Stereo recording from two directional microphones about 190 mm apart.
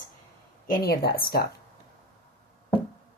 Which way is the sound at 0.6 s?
50° left (ahead or behind).